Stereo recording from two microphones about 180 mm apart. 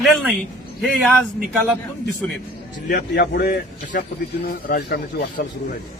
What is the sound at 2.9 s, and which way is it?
Speech, 60° left (ahead or behind).